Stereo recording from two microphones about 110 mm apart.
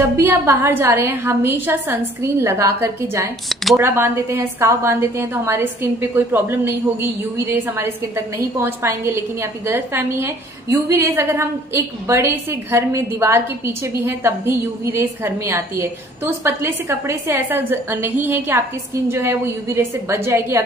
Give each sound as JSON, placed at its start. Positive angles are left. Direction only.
{"t": 0.2, "sound": "a woman's voice", "side_deg": -20}